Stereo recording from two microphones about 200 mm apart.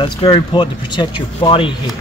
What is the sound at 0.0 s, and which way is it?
Speech, 20° left (ahead or behind).